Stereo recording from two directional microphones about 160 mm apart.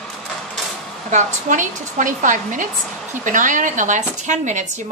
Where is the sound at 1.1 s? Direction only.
50° right (ahead or behind).